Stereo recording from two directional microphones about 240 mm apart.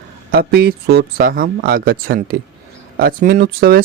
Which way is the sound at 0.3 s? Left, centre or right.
Right.